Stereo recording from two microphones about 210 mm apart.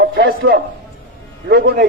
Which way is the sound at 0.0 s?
50° right (ahead or behind).